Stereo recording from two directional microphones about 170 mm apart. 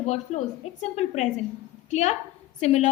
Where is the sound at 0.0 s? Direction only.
45° left (ahead or behind).